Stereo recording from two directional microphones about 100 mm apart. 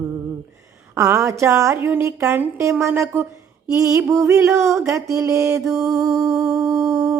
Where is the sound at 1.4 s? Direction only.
30° right (ahead or behind).